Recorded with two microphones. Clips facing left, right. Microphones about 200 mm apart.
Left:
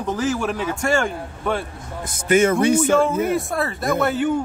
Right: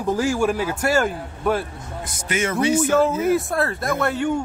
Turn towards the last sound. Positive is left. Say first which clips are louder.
# left 2 dB
turn(degrees=0)  # may be behind; listen again after turning